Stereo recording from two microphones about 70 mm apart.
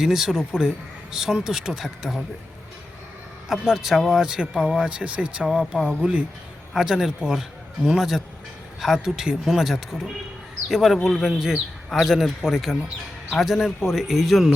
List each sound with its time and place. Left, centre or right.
0.0 s a man's voice: centre
3.5 s a man's voice: centre